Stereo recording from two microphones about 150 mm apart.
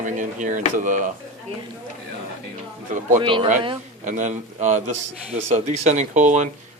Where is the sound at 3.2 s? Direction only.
35° right (ahead or behind).